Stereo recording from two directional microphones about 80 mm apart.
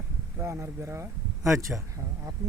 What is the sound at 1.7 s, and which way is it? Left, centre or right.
Speech, centre.